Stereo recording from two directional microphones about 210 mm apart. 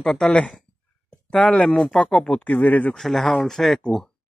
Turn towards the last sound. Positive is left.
turn(degrees=0)  # may be behind; listen again after turning